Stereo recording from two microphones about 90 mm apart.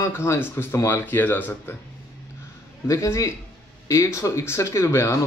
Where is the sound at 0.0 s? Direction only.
30° left (ahead or behind).